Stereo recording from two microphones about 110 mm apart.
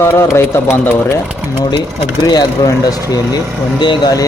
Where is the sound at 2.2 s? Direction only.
40° left (ahead or behind).